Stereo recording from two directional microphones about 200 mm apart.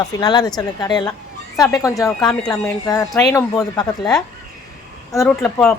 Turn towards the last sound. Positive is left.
turn(degrees=10)  # may be behind; listen again after turning